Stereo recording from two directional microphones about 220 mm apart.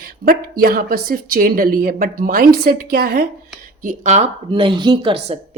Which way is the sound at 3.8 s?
30° right (ahead or behind).